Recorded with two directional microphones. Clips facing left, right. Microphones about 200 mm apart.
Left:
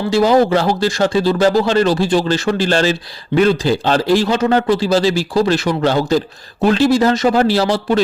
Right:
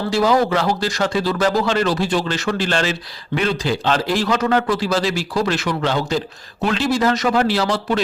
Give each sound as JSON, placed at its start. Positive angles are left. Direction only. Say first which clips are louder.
{"t": 0.1, "sound": "a man's voice", "louder": "left 5 dB", "side_deg": 30}